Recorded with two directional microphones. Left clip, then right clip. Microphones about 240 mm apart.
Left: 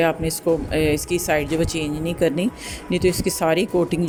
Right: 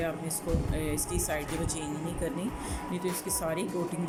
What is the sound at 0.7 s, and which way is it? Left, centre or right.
Speech, left.